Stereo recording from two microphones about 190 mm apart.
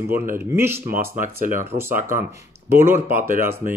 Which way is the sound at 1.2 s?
45° right (ahead or behind).